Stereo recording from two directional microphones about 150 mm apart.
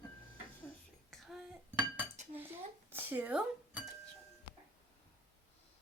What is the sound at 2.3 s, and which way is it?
Dishes, 15° right (ahead or behind).